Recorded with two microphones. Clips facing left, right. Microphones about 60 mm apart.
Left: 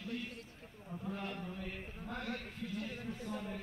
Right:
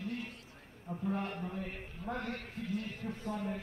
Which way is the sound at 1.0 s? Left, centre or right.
Right.